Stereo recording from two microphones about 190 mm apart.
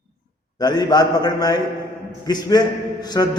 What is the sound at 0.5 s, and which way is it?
A man's voice, 20° left (ahead or behind).